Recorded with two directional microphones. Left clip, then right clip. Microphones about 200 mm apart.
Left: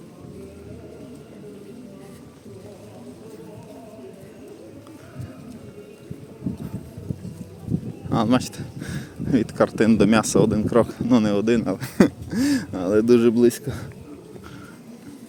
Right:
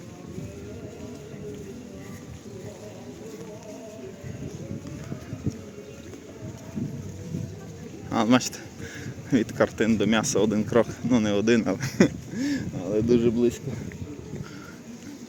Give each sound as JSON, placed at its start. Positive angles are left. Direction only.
{"t": 8.1, "sound": "speech", "side_deg": 10}
{"t": 8.8, "sound": "a sound", "side_deg": 25}
{"t": 9.3, "sound": "speech", "side_deg": 15}
{"t": 11.9, "sound": "speech", "side_deg": 35}